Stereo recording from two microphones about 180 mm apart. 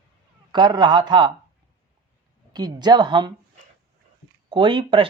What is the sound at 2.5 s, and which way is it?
Speech, 25° right (ahead or behind).